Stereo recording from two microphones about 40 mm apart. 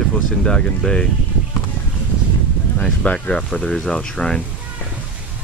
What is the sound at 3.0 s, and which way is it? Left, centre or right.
Speech, left.